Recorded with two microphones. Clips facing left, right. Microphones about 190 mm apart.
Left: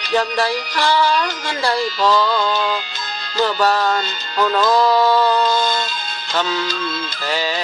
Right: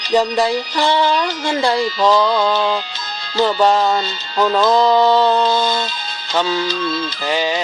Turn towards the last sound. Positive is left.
turn(degrees=-20)  # may be behind; listen again after turning